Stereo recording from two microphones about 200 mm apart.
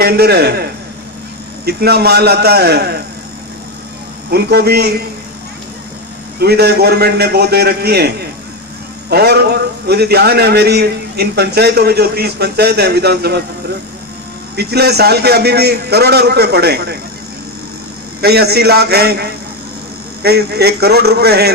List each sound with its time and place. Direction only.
0.0 s a man's voice: 50° right (ahead or behind)
4.3 s a man's voice: 55° right (ahead or behind)
6.4 s a man's voice: 55° right (ahead or behind)
14.5 s a man's voice: 55° right (ahead or behind)
18.2 s a man's voice: 50° right (ahead or behind)